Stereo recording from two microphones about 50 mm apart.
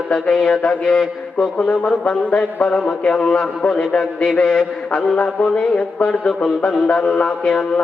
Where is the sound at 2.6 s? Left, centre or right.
Centre.